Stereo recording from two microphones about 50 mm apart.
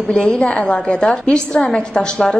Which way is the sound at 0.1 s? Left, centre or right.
Centre.